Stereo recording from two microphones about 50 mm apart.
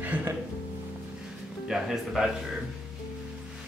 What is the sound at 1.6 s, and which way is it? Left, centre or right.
Speech, centre.